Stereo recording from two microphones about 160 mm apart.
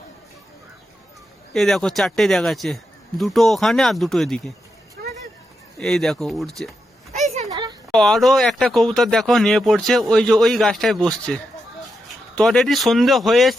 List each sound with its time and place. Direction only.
1.5 s speech: centre (ahead or behind)
5.8 s speech: centre (ahead or behind)
7.5 s a sound: 25° right (ahead or behind)
7.9 s speech: 5° left (ahead or behind)